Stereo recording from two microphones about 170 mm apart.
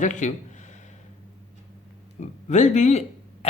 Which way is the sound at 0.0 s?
45° left (ahead or behind).